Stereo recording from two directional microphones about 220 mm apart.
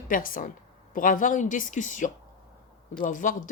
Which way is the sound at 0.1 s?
40° left (ahead or behind).